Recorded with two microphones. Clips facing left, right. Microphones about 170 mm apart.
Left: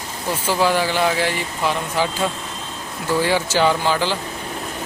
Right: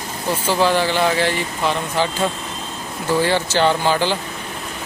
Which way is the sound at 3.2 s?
10° left (ahead or behind).